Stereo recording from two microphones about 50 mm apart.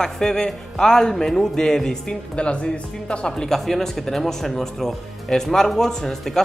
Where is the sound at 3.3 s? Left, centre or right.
Centre.